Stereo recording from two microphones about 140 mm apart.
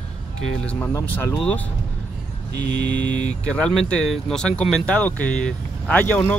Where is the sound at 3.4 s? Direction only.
5° left (ahead or behind).